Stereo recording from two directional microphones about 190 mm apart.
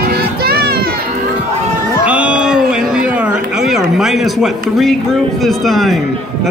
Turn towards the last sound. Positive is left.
turn(degrees=0)  # may be behind; listen again after turning